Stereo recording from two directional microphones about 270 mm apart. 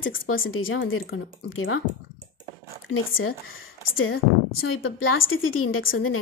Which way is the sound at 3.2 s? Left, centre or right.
Left.